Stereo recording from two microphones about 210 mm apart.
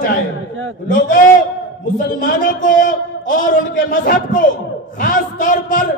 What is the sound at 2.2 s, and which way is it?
A man's voice, 40° left (ahead or behind).